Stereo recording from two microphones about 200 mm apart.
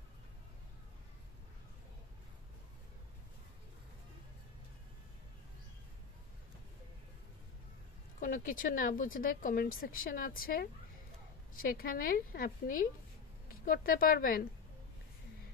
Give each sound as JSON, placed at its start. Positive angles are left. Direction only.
{"t": 8.2, "sound": "speech", "side_deg": 45}